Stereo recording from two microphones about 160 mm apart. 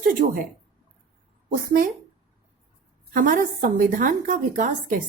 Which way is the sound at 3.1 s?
55° right (ahead or behind).